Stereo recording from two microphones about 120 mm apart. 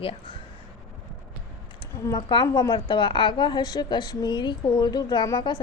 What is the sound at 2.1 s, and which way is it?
A woman's voice, 40° left (ahead or behind).